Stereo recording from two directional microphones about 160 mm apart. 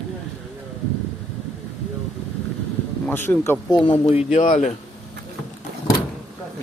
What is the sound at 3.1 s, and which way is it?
Speech, 10° left (ahead or behind).